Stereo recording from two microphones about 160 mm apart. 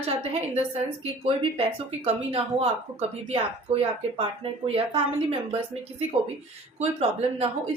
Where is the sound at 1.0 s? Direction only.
35° right (ahead or behind).